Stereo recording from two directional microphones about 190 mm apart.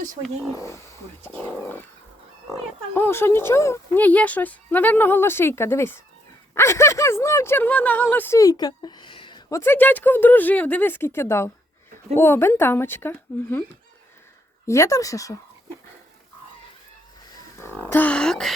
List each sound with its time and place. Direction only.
0.5 s speech: 15° left (ahead or behind)
9.6 s speech: 10° left (ahead or behind)
14.7 s speech: 15° left (ahead or behind)
17.3 s a sound: 15° left (ahead or behind)